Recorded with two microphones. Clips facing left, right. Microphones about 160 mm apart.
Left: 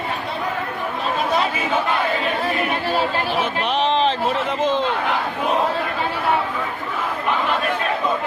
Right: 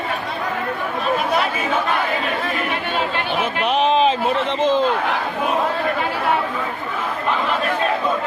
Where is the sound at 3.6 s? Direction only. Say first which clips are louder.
Right 4 dB; 5° right (ahead or behind).